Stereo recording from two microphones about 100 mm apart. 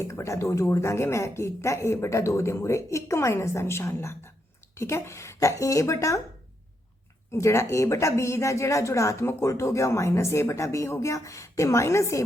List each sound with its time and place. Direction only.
0.1 s a woman's voice: 30° left (ahead or behind)
7.3 s a woman's voice: 30° left (ahead or behind)